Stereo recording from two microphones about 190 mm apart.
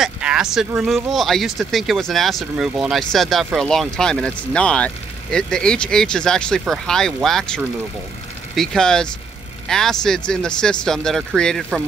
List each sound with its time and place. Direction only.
0.0 s speech: 5° right (ahead or behind)